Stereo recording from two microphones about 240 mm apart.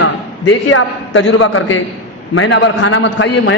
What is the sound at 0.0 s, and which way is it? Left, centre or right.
A man's voice, left.